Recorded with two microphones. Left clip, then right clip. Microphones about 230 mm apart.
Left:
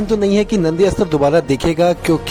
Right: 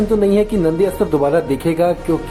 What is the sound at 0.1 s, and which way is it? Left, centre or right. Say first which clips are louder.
Speech: left 1 dB; left.